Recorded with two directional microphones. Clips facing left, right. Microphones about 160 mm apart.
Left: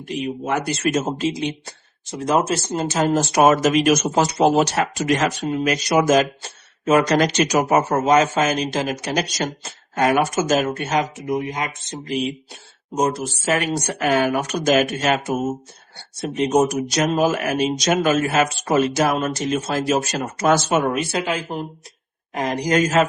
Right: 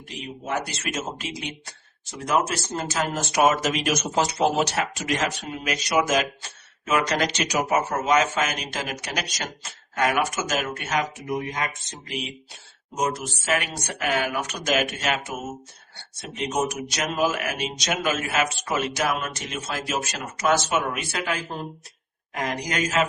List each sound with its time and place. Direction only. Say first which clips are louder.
0.9 s speech: left 10 dB; 35° left (ahead or behind)
1.3 s speech: left 9 dB; 25° left (ahead or behind)
3.3 s speech: left 5 dB; 50° left (ahead or behind); by 11.9 s 20° left (ahead or behind)
13.0 s speech: left 5 dB; 35° left (ahead or behind)
16.2 s speech: left 8 dB; 45° left (ahead or behind); by 21.3 s 30° left (ahead or behind)
22.4 s speech: left 8 dB; 35° left (ahead or behind)